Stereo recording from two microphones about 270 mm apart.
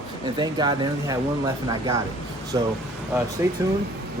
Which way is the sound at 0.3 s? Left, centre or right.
Centre.